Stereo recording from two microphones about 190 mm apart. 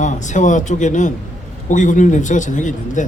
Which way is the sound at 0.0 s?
40° left (ahead or behind).